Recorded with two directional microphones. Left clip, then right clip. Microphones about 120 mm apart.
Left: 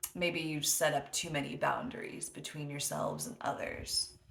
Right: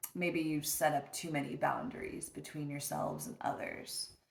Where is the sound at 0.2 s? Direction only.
20° left (ahead or behind).